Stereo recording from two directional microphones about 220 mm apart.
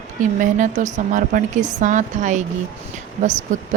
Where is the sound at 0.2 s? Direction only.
35° right (ahead or behind).